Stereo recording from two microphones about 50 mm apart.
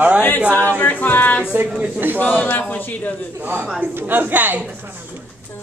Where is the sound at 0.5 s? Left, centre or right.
Left.